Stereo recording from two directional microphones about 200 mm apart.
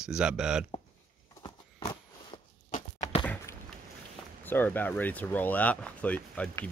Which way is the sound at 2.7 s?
35° left (ahead or behind).